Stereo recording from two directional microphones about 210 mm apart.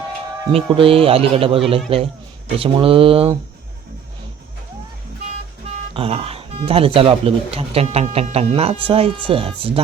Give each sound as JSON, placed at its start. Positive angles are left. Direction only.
{"t": 0.5, "sound": "speech", "side_deg": -25}
{"t": 5.9, "sound": "speech", "side_deg": -25}